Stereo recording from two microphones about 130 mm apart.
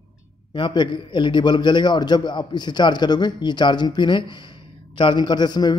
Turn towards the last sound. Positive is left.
turn(degrees=35)  # may be behind; listen again after turning